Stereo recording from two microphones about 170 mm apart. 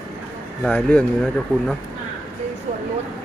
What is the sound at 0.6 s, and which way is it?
Speech, 5° left (ahead or behind).